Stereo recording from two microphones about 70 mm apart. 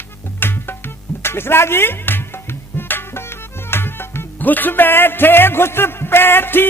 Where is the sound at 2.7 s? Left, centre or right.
Left.